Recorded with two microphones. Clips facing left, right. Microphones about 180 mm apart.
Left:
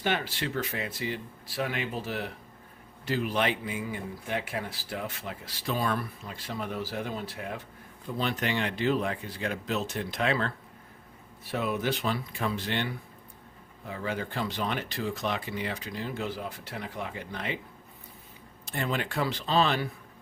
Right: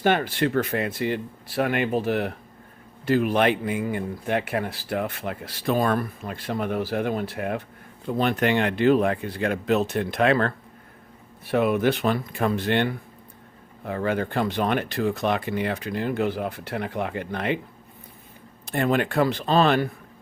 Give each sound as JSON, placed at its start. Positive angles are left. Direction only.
{"t": 0.0, "sound": "speech", "side_deg": -50}
{"t": 18.6, "sound": "speech", "side_deg": -60}